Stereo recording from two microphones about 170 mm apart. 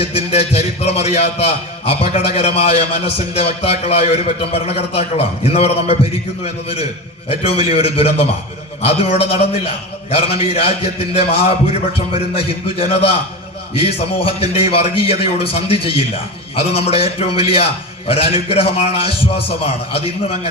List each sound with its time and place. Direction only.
0.0 s a man's voice: 35° left (ahead or behind)
18.4 s a man's voice: 35° left (ahead or behind)